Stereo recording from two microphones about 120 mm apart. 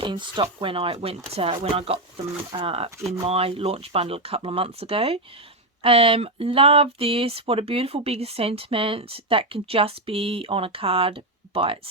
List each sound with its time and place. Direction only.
0.0 s speech: 40° right (ahead or behind)